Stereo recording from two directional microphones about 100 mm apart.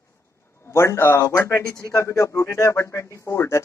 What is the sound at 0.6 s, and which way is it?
A man's voice, 25° left (ahead or behind).